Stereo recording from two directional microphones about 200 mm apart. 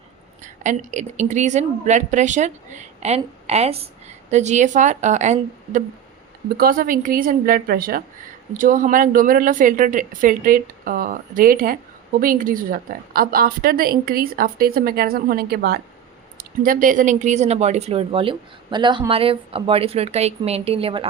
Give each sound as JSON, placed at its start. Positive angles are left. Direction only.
{"t": 0.4, "sound": "a woman's voice", "side_deg": -40}